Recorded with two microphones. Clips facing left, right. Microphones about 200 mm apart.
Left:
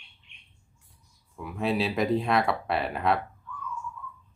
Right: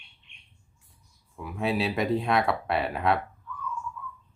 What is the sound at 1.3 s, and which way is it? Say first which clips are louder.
Speech: even; centre (ahead or behind).